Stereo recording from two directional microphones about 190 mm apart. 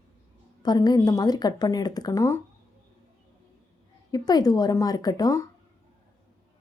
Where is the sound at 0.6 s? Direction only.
20° left (ahead or behind).